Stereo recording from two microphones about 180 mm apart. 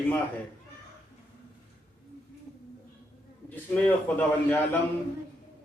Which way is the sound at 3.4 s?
10° left (ahead or behind).